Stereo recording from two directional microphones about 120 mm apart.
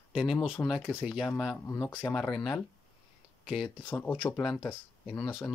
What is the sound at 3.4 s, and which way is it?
Speech, centre (ahead or behind).